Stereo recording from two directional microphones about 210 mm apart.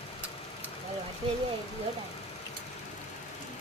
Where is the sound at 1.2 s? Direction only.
25° right (ahead or behind).